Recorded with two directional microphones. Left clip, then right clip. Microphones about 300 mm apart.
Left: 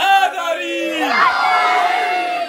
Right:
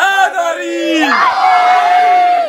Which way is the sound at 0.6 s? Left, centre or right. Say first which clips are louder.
Right 6 dB; right.